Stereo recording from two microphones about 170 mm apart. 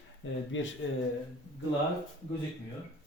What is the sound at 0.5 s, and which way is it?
Speech, 90° left.